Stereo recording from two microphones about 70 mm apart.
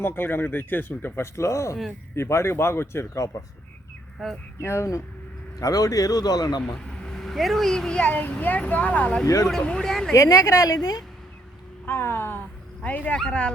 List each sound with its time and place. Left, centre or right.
0.0 s speech: left
4.6 s speech: left
5.5 s a man's voice: left
6.6 s speech: centre
8.1 s speech: left
9.2 s speech: left
9.5 s speech: centre
10.2 s a man's voice: left
11.9 s speech: left; by 13.5 s centre